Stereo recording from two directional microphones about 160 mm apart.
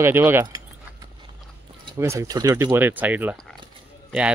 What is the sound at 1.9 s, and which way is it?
A man's voice, 15° right (ahead or behind).